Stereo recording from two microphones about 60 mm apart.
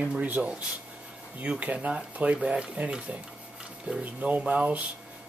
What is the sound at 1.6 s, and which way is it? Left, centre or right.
Speech, right.